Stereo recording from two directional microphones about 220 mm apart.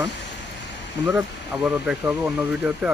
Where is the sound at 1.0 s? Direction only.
20° right (ahead or behind).